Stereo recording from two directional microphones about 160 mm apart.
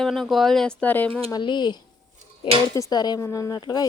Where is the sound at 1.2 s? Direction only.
25° left (ahead or behind).